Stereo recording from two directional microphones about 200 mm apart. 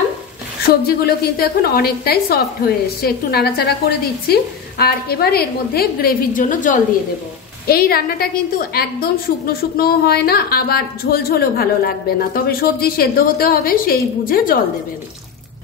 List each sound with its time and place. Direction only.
0.8 s a woman's voice: 50° left (ahead or behind)